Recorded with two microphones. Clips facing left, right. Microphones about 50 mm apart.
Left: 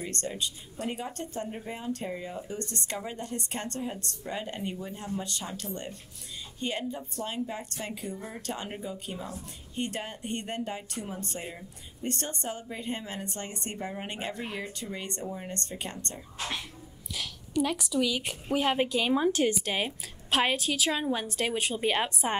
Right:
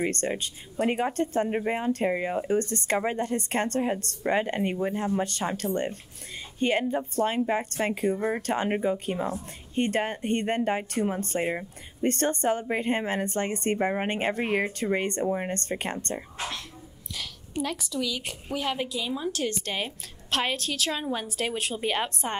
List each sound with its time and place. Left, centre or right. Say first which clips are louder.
0.0 s speech: right 6 dB; right
2.6 s speech: right 9 dB; right
17.6 s a woman's voice: left 2 dB; centre
18.6 s speech: left 3 dB; left
19.2 s speech: left 4 dB; left
19.6 s a woman's voice: left 1 dB; centre